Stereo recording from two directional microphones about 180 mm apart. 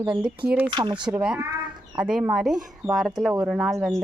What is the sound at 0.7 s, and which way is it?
Speech, 25° right (ahead or behind).